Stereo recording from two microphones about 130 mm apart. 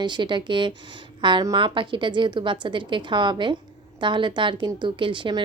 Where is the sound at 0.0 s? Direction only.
35° right (ahead or behind).